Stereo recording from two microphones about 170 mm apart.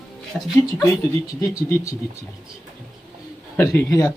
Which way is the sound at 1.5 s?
20° left (ahead or behind).